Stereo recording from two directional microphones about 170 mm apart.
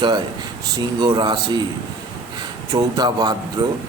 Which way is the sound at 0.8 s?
25° right (ahead or behind).